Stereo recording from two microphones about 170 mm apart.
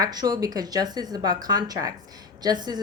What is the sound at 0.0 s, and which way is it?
A woman's voice, 25° right (ahead or behind).